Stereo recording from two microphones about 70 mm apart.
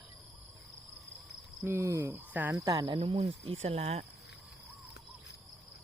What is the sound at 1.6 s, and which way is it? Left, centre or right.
Speech, right.